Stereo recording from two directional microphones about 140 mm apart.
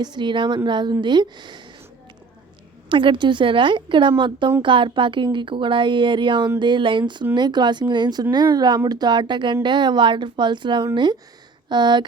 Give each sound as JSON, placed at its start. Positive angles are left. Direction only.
{"t": 0.0, "sound": "speech", "side_deg": -30}
{"t": 2.9, "sound": "speech", "side_deg": -35}